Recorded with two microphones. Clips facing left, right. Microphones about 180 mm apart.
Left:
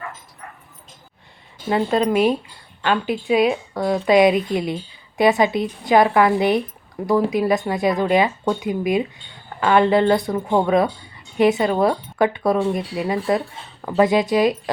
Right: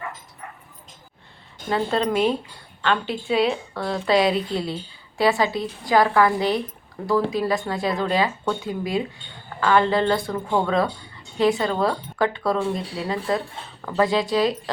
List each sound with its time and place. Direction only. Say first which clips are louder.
1.6 s a woman's voice: left 4 dB; 10° left (ahead or behind)